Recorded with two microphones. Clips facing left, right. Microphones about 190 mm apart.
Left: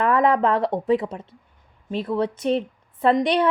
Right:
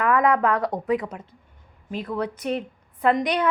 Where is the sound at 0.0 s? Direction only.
30° left (ahead or behind).